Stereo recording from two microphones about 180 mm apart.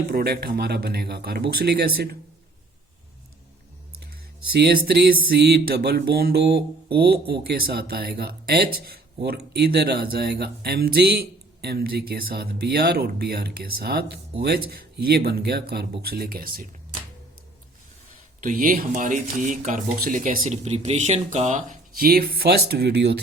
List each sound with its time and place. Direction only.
0.1 s speech: 60° right (ahead or behind)
4.5 s speech: 60° right (ahead or behind)
18.3 s speech: 50° right (ahead or behind); by 23.1 s 65° right (ahead or behind)